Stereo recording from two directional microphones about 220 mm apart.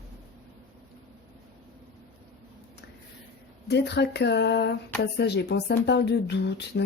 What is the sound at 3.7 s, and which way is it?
Speech, 50° left (ahead or behind).